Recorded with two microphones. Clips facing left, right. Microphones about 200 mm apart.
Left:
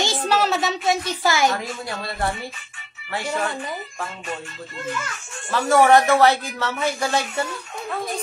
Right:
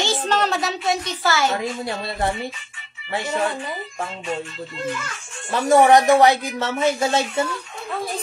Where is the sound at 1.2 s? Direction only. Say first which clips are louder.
Left 1 dB; 15° left (ahead or behind).